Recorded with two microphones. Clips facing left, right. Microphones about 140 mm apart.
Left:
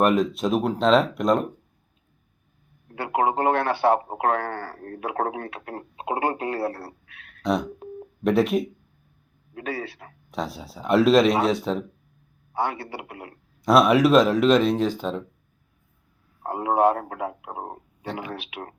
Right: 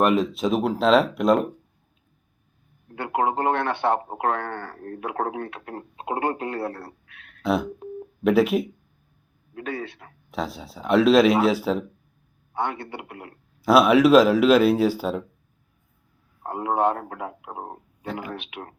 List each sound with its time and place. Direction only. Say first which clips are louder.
0.0 s a man's voice: even; centre (ahead or behind)
3.0 s a man's voice: left 1 dB; 5° left (ahead or behind)
16.4 s a man's voice: left 2 dB; 10° left (ahead or behind)
18.1 s a man's voice: even; centre (ahead or behind)